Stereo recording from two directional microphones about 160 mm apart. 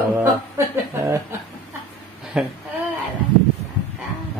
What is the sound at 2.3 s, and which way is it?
Speech, 5° right (ahead or behind).